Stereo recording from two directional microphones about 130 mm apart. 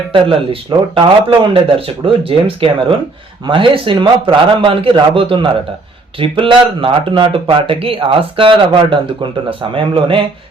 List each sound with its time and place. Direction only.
0.1 s speech: 45° right (ahead or behind)